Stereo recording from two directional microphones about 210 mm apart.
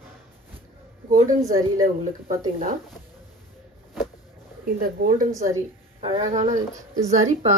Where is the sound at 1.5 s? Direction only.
15° right (ahead or behind).